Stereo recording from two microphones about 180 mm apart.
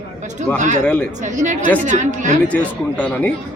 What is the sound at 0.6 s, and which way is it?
Speech, 45° right (ahead or behind).